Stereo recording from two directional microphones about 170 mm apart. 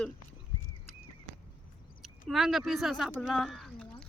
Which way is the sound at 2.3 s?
Centre (ahead or behind).